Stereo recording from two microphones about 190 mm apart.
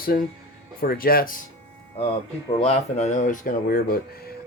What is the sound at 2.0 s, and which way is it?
Speech, 30° left (ahead or behind).